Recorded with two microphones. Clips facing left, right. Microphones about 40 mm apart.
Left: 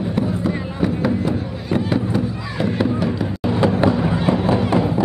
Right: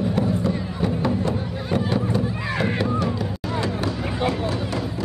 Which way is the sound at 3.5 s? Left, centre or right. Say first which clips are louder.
Left 10 dB; left.